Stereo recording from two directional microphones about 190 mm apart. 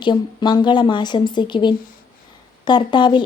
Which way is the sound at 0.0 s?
25° left (ahead or behind).